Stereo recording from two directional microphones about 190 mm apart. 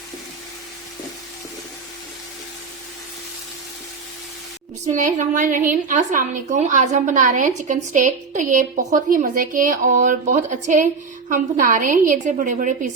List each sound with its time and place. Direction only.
4.9 s a woman's voice: 40° right (ahead or behind)